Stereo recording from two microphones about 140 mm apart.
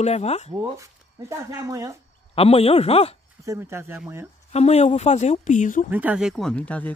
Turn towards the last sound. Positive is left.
turn(degrees=10)  # may be behind; listen again after turning